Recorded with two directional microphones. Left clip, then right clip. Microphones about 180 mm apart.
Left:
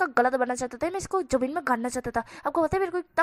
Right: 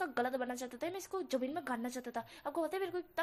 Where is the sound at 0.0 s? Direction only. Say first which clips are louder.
Left 13 dB; 30° left (ahead or behind).